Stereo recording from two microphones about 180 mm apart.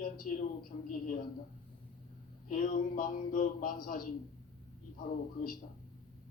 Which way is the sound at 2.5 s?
45° left (ahead or behind).